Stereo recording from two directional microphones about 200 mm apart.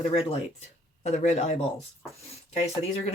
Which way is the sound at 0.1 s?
30° left (ahead or behind).